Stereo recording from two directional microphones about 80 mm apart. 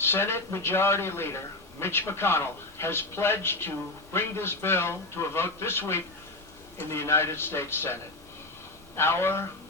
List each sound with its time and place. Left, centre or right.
0.0 s a man's voice: left
9.0 s a man's voice: left